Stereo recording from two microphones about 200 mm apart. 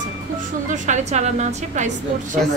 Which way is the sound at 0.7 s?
35° right (ahead or behind).